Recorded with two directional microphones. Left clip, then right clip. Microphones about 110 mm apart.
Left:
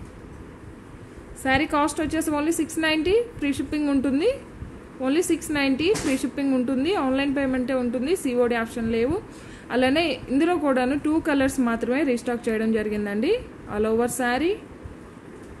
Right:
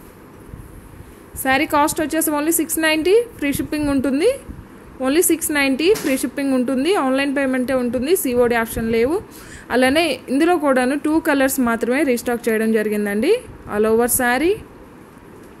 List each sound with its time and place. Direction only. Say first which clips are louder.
1.4 s a woman's voice: right 5 dB; 40° right (ahead or behind)